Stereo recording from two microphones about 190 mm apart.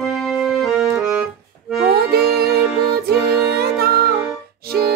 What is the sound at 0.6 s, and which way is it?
Music, 15° right (ahead or behind).